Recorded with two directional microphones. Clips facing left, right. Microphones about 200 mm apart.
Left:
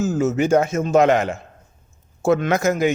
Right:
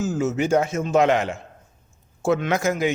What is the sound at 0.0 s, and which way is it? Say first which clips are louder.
A man's voice: left 3 dB; 45° left (ahead or behind).